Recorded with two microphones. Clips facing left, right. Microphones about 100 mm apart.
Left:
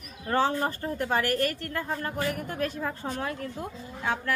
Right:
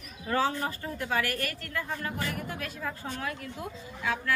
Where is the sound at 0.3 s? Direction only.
35° left (ahead or behind).